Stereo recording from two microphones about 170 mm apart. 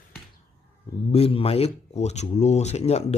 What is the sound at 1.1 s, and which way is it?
Speech, 35° left (ahead or behind).